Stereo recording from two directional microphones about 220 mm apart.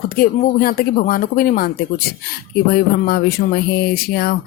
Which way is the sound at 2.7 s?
45° left (ahead or behind).